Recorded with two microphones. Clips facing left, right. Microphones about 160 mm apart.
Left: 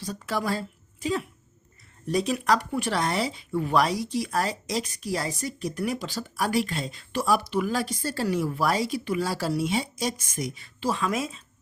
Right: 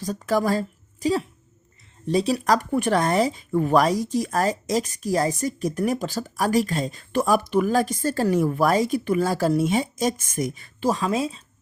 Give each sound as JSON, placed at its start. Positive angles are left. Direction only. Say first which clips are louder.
{"t": 0.0, "sound": "a woman's voice", "louder": "right 7 dB", "side_deg": -45}